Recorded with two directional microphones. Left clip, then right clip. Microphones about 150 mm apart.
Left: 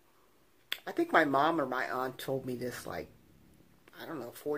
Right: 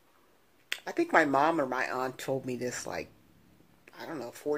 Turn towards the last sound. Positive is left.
turn(degrees=-15)  # may be behind; listen again after turning